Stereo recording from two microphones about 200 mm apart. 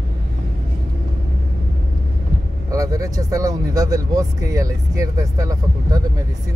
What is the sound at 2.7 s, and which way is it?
Speech, 15° right (ahead or behind).